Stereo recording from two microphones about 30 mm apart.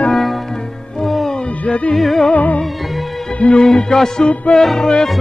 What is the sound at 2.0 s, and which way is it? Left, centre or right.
Music, centre.